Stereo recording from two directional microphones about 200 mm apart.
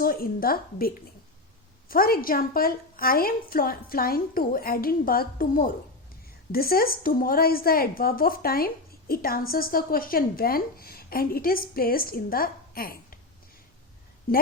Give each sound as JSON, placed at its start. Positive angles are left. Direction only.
{"t": 0.0, "sound": "a woman's voice", "side_deg": 45}
{"t": 14.3, "sound": "a woman's voice", "side_deg": 45}